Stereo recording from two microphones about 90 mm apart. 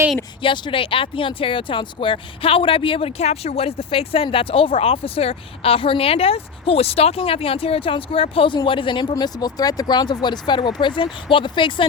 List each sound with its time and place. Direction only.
0.4 s speech: 65° left (ahead or behind); by 8.5 s 90° left
8.6 s speech: 70° left (ahead or behind)
9.1 s speech: 45° left (ahead or behind); by 11.9 s 65° left (ahead or behind)